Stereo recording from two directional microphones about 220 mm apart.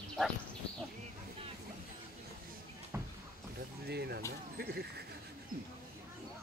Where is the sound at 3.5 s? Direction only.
45° right (ahead or behind).